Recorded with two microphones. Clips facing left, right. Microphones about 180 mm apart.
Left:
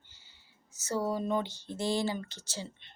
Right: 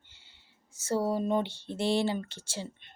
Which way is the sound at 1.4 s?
65° right (ahead or behind).